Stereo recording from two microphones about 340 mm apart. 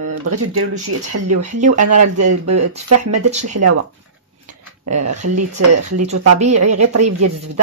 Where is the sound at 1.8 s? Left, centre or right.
Right.